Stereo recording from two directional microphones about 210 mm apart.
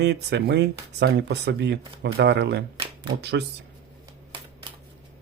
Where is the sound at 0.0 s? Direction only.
55° right (ahead or behind).